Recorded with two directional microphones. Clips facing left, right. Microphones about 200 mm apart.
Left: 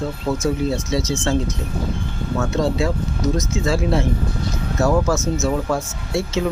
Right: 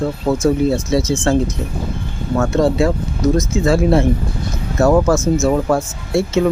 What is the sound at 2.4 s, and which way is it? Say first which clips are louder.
Speech: right 6 dB; 55° right (ahead or behind).